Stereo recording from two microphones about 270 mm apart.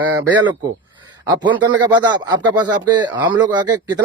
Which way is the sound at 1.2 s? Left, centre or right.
Centre.